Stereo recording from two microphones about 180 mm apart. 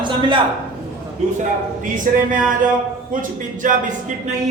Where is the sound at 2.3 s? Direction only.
50° right (ahead or behind).